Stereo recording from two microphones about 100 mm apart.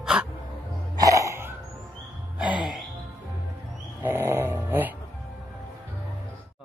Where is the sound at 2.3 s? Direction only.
10° right (ahead or behind).